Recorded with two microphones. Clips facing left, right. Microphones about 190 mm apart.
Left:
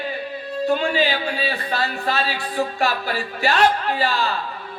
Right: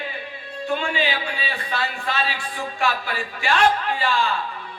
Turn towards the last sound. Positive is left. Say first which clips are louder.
# left 1 dB
turn(degrees=40)  # may be behind; listen again after turning